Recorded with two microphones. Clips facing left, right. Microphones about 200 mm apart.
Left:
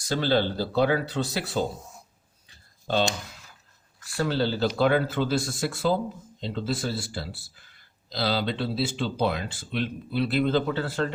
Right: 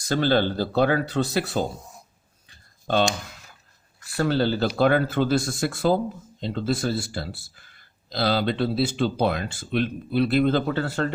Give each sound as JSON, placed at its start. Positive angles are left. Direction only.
{"t": 0.1, "sound": "speech", "side_deg": -55}
{"t": 2.5, "sound": "a sound", "side_deg": -55}
{"t": 4.2, "sound": "speech", "side_deg": -50}